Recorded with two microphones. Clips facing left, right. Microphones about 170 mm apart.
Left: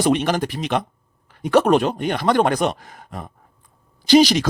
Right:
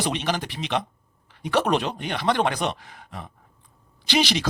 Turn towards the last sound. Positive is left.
turn(degrees=40)  # may be behind; listen again after turning